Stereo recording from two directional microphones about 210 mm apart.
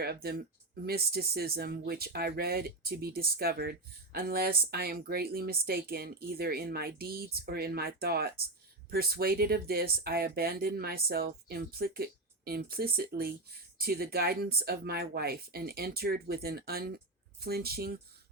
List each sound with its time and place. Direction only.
0.0 s speech: 45° right (ahead or behind)